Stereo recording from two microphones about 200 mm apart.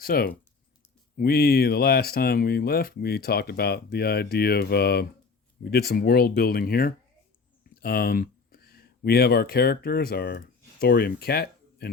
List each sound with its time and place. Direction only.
0.0 s speech: 50° left (ahead or behind)